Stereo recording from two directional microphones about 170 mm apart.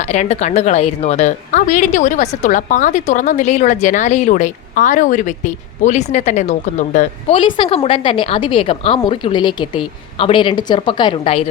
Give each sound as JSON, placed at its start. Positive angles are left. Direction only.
{"t": 0.1, "sound": "a woman's voice", "side_deg": 40}
{"t": 7.3, "sound": "a woman's voice", "side_deg": 30}